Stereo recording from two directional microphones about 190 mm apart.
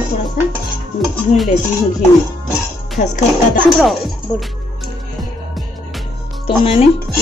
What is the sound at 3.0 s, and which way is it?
Speech, 40° left (ahead or behind).